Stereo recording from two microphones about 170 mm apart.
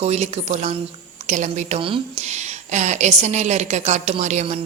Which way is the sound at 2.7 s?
45° right (ahead or behind).